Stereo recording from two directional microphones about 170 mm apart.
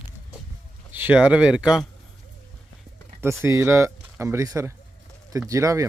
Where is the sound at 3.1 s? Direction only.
15° right (ahead or behind).